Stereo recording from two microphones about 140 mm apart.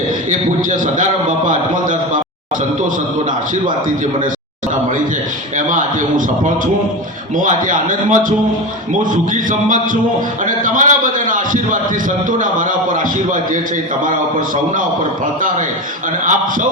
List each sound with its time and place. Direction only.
0.3 s a man's voice: 70° right (ahead or behind)
3.5 s a man's voice: 70° right (ahead or behind)
5.5 s a man's voice: 70° right (ahead or behind)
7.4 s a man's voice: 70° right (ahead or behind)